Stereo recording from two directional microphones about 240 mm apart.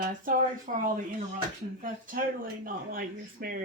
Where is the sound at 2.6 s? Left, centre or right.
Right.